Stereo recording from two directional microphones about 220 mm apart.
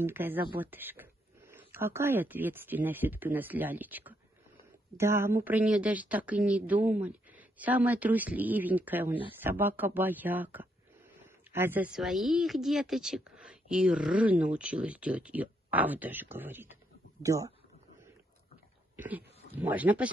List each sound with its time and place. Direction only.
0.0 s speech: 10° right (ahead or behind)
18.9 s speech: 10° right (ahead or behind)